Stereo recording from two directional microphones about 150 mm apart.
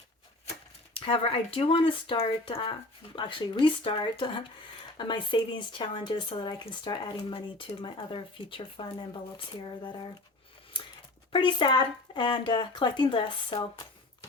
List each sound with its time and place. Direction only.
0.9 s speech: 35° left (ahead or behind)
11.3 s speech: 30° left (ahead or behind)